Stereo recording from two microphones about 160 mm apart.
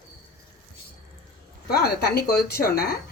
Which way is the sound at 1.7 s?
85° left.